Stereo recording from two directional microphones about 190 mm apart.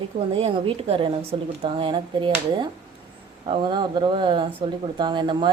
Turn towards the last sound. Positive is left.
turn(degrees=-25)  # may be behind; listen again after turning